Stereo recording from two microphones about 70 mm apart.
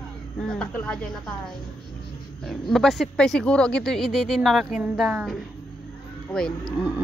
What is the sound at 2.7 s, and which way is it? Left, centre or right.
Speech, centre.